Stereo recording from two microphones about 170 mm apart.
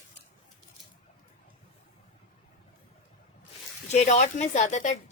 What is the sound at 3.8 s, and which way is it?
A woman's voice, 40° left (ahead or behind).